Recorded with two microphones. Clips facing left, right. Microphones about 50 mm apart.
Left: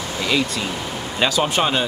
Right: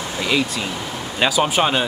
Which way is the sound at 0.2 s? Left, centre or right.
Centre.